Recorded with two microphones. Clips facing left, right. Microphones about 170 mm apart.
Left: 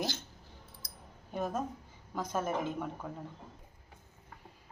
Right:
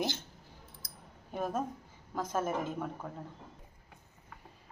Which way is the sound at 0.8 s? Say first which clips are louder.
Even; 50° right (ahead or behind).